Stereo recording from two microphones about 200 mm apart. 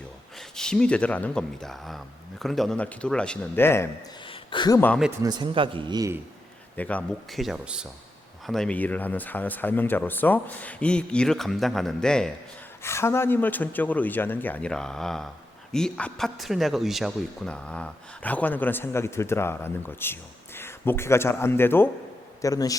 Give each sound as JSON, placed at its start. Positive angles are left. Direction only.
{"t": 0.3, "sound": "speech", "side_deg": 5}
{"t": 4.3, "sound": "a sound", "side_deg": 20}
{"t": 5.2, "sound": "a man's voice", "side_deg": -20}
{"t": 6.7, "sound": "a man's voice", "side_deg": 5}